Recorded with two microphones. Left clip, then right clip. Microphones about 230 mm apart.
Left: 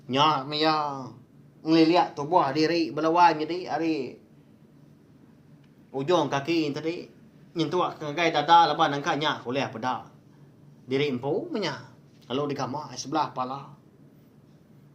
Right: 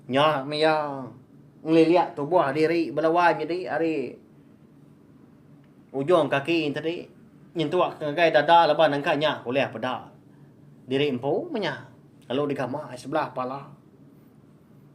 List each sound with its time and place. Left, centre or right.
0.1 s speech: left
5.9 s a man's voice: left